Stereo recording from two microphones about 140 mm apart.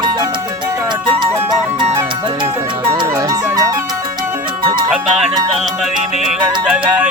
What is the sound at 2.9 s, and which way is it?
Music, 30° right (ahead or behind).